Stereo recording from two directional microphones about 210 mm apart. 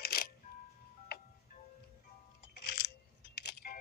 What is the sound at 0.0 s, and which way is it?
Music, 45° left (ahead or behind).